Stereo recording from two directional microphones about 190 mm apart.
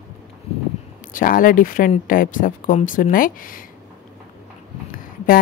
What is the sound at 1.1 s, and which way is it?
A woman's voice, 45° left (ahead or behind).